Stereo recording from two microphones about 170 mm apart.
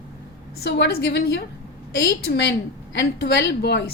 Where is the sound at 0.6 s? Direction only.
85° left.